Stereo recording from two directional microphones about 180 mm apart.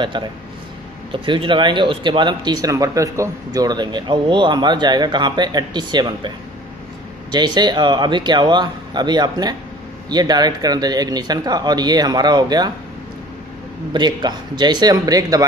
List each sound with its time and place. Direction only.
0.1 s speech: 25° right (ahead or behind)
13.9 s speech: 25° right (ahead or behind)